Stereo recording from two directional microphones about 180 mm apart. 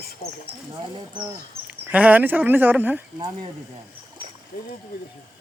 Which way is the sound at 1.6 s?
10° right (ahead or behind).